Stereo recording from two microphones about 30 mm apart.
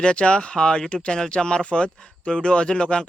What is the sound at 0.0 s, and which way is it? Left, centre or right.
Speech, left.